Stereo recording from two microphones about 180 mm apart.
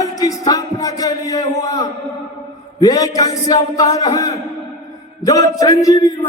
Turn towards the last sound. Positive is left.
turn(degrees=20)  # may be behind; listen again after turning